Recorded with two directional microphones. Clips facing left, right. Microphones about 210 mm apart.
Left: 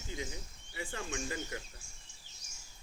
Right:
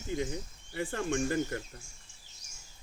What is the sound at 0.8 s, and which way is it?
Speech, 55° right (ahead or behind).